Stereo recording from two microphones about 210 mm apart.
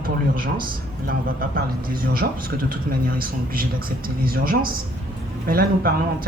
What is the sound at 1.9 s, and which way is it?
Speech, 45° right (ahead or behind).